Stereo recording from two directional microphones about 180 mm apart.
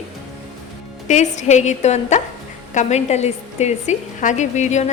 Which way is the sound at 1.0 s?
45° left (ahead or behind).